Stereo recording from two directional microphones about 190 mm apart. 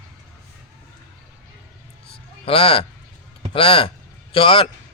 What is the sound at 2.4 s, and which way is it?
A man's voice, 30° left (ahead or behind).